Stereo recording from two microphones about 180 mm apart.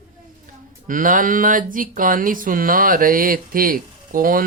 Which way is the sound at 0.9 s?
50° right (ahead or behind).